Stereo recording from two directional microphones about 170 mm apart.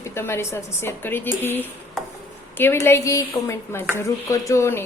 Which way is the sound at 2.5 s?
15° left (ahead or behind).